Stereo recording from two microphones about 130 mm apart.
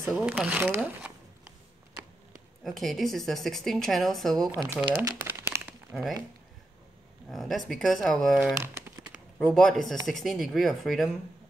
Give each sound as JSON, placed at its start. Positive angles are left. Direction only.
{"t": 0.2, "sound": "speech", "side_deg": -10}
{"t": 2.6, "sound": "a woman's voice", "side_deg": 0}
{"t": 4.7, "sound": "speech", "side_deg": -10}
{"t": 5.0, "sound": "crumpling", "side_deg": -20}
{"t": 5.7, "sound": "crumpling", "side_deg": 0}
{"t": 7.2, "sound": "a woman's voice", "side_deg": 0}
{"t": 8.5, "sound": "crumpling", "side_deg": -15}
{"t": 9.4, "sound": "a woman's voice", "side_deg": 5}